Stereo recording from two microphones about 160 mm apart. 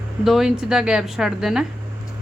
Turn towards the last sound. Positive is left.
turn(degrees=-5)  # may be behind; listen again after turning